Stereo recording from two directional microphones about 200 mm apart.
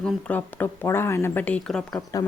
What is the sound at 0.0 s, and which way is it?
Speech, 10° left (ahead or behind).